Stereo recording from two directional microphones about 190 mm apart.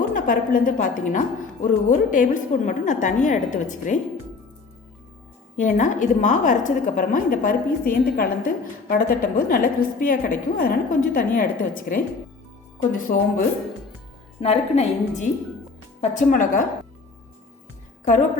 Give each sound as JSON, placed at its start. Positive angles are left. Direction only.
{"t": 0.1, "sound": "a woman's voice", "side_deg": 45}
{"t": 5.5, "sound": "a woman's voice", "side_deg": 40}
{"t": 14.4, "sound": "a woman's voice", "side_deg": 35}
{"t": 18.0, "sound": "a woman's voice", "side_deg": 40}